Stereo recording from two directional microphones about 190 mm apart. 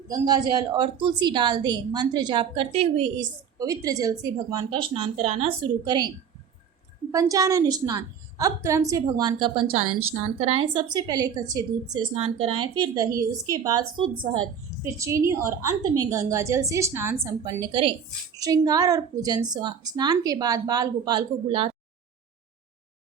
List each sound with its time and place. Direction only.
0.1 s a woman's voice: 20° right (ahead or behind)
3.6 s a woman's voice: 20° right (ahead or behind)
7.1 s a woman's voice: 15° right (ahead or behind)
10.9 s a woman's voice: 20° right (ahead or behind)
12.1 s a woman's voice: 30° right (ahead or behind)